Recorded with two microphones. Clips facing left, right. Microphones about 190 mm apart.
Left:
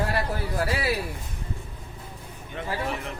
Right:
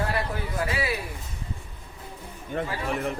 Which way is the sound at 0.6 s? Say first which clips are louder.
Left 1 dB; 35° left (ahead or behind).